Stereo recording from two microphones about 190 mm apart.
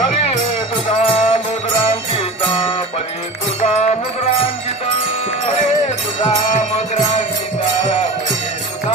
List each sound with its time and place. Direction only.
1.0 s music: 30° left (ahead or behind)